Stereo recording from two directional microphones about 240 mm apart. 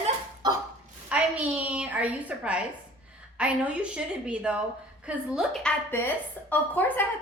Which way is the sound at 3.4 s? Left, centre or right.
Centre.